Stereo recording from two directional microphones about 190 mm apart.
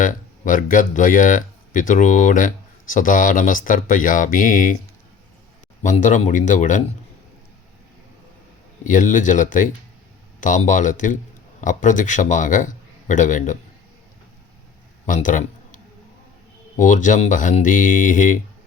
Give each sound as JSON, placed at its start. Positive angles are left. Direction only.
{"t": 0.0, "sound": "speech", "side_deg": 45}
{"t": 5.8, "sound": "a man's voice", "side_deg": 40}
{"t": 8.8, "sound": "a man's voice", "side_deg": 40}
{"t": 15.0, "sound": "a sound", "side_deg": 45}
{"t": 16.7, "sound": "speech", "side_deg": 40}